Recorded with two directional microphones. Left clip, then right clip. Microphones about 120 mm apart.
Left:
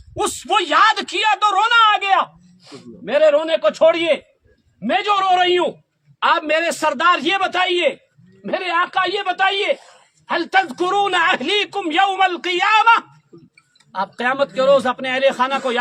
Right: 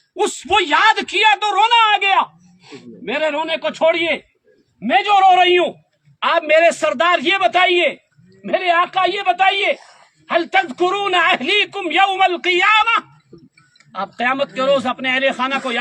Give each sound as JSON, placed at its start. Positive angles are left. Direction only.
{"t": 0.4, "sound": "a woman's voice", "side_deg": 40}